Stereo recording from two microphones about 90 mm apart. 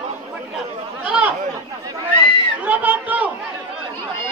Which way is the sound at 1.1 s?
15° right (ahead or behind).